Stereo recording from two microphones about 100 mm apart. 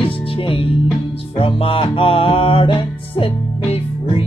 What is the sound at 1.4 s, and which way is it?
Music, 65° left (ahead or behind).